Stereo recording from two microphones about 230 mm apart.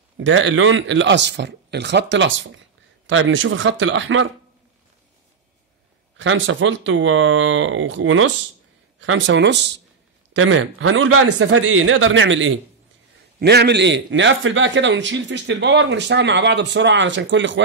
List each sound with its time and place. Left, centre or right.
0.2 s a man's voice: right
6.1 s a man's voice: right